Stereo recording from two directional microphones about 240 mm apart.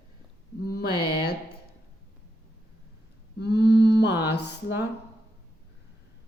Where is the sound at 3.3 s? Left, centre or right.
Left.